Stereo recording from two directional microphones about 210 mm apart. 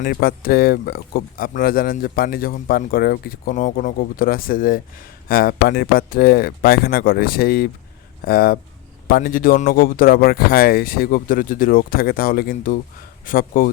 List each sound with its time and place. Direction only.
0.0 s speech: 45° left (ahead or behind)